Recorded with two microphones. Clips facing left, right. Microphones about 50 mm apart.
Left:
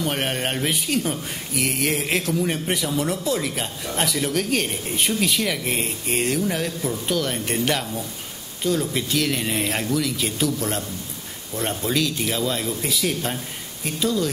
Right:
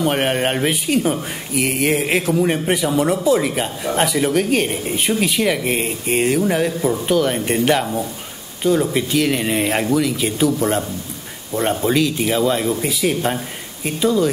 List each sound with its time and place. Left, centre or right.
0.0 s speech: centre